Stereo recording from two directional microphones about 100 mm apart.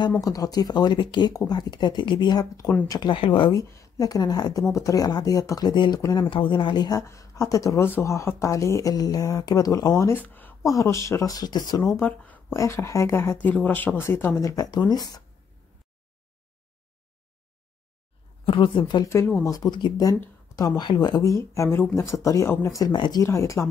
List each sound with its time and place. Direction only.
0.2 s speech: 40° left (ahead or behind)
3.0 s speech: 55° left (ahead or behind)
3.5 s speech: 30° left (ahead or behind)
6.3 s speech: 55° left (ahead or behind)
7.0 s speech: 30° left (ahead or behind)
10.1 s a woman's voice: 20° left (ahead or behind)
10.6 s speech: 35° left (ahead or behind)
12.0 s speech: 15° left (ahead or behind)
12.5 s speech: 30° left (ahead or behind)
14.5 s speech: 40° left (ahead or behind)
18.4 s a woman's voice: 55° left (ahead or behind)
19.4 s speech: 40° left (ahead or behind)
22.9 s speech: 50° left (ahead or behind)
23.2 s speech: 30° left (ahead or behind)